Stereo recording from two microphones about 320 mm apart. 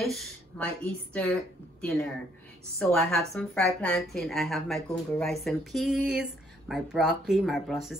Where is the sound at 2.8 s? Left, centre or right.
Centre.